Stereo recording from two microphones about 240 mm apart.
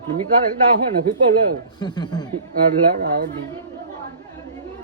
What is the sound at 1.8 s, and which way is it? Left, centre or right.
Speech, centre.